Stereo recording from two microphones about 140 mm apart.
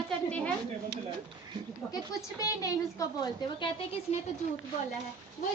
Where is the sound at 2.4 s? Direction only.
25° left (ahead or behind).